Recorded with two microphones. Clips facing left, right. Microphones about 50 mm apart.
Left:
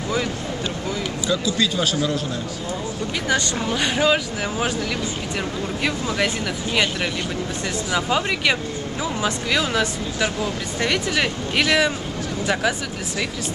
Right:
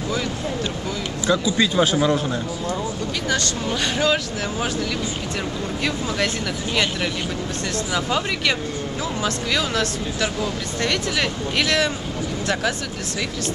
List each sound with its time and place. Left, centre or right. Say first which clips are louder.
1.2 s a man's voice: right 3 dB; centre
3.3 s speech: left 2 dB; centre
5.9 s speech: left 1 dB; centre